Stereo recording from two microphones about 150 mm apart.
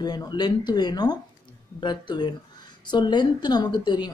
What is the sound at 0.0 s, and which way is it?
A man's voice, 25° left (ahead or behind).